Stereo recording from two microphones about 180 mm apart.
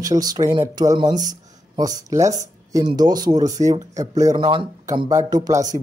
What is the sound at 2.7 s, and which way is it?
Speech, 20° right (ahead or behind).